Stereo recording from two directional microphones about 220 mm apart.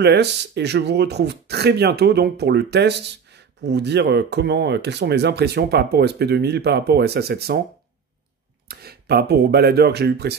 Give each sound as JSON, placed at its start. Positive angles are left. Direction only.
{"t": 0.0, "sound": "speech", "side_deg": -50}
{"t": 8.6, "sound": "speech", "side_deg": -45}